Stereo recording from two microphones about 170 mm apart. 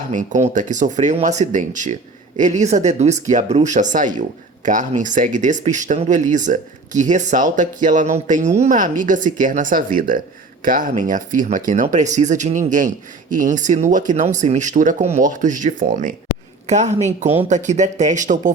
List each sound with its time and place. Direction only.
0.1 s speech: 45° right (ahead or behind)